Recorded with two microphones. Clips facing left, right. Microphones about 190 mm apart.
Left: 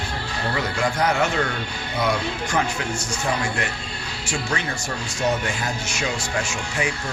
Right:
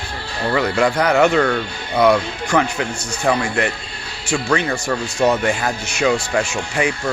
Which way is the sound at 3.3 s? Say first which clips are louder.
Right 8 dB; 80° right.